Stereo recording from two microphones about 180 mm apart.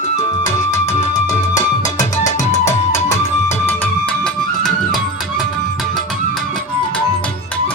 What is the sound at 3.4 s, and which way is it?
Music, 15° left (ahead or behind).